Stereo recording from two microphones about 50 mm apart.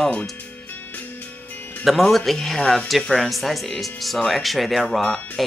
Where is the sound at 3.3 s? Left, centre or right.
Centre.